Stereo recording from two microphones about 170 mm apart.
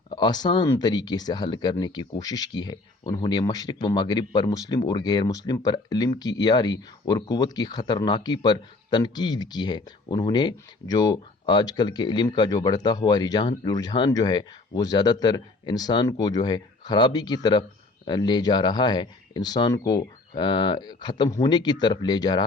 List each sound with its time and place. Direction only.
0.1 s speech: 25° left (ahead or behind)